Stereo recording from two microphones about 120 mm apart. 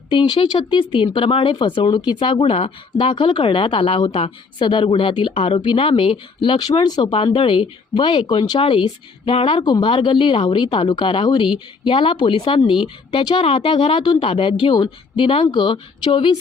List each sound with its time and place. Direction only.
0.1 s speech: 45° left (ahead or behind)
6.8 s speech: 35° left (ahead or behind)
7.3 s speech: 50° left (ahead or behind)